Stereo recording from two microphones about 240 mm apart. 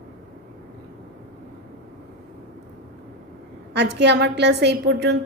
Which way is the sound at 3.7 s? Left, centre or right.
Right.